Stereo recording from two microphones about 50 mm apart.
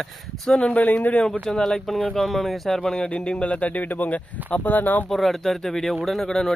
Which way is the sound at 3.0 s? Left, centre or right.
Left.